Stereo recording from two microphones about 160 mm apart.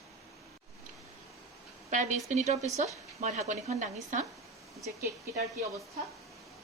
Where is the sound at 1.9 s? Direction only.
50° right (ahead or behind).